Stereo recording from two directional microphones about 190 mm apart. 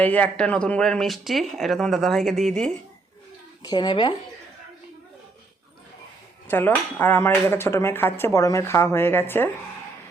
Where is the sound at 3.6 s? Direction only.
20° left (ahead or behind).